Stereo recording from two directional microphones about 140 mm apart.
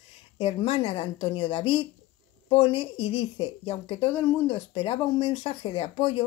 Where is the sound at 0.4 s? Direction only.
40° left (ahead or behind).